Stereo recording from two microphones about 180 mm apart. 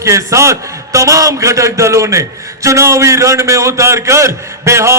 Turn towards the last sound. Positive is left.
turn(degrees=-15)  # may be behind; listen again after turning